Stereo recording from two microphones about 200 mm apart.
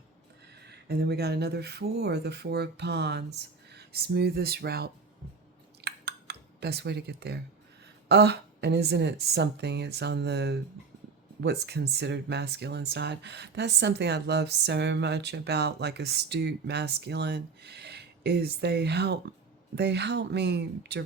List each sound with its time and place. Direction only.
0.9 s speech: 55° right (ahead or behind)
5.8 s a sound: 55° right (ahead or behind)
8.0 s speech: 55° right (ahead or behind)